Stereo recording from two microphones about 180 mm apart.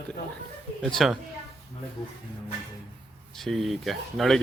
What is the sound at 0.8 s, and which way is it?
Speech, centre (ahead or behind).